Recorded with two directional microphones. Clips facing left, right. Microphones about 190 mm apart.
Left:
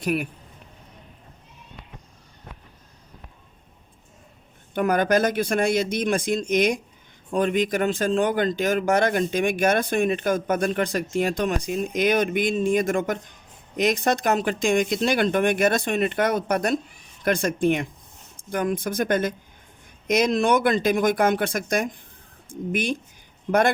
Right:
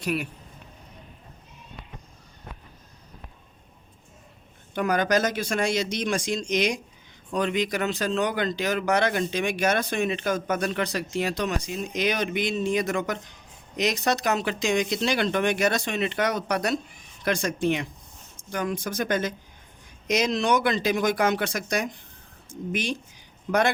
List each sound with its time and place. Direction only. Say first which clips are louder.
0.0 s speech: left 3 dB; 50° left (ahead or behind)
4.7 s speech: left 3 dB; 50° left (ahead or behind)